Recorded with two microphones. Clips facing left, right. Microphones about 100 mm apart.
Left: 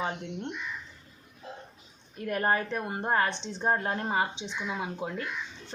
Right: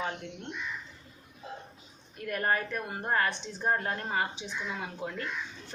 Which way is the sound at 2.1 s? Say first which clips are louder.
Left 3 dB; 25° left (ahead or behind).